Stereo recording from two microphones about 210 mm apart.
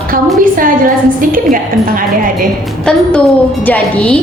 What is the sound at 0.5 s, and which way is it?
Speech, 40° right (ahead or behind).